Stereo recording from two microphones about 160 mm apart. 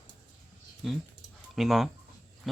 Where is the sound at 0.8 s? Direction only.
Centre (ahead or behind).